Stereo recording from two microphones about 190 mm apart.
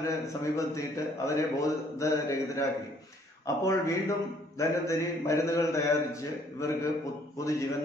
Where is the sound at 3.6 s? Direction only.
15° left (ahead or behind).